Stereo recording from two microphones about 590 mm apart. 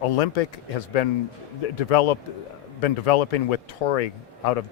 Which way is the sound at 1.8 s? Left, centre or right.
Left.